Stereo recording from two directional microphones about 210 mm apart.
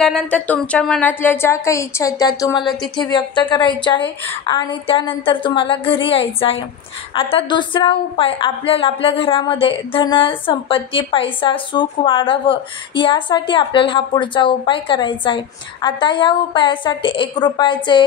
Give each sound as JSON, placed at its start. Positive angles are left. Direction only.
{"t": 0.0, "sound": "speech", "side_deg": 5}
{"t": 2.6, "sound": "a woman's voice", "side_deg": 0}
{"t": 3.0, "sound": "a woman's voice", "side_deg": 20}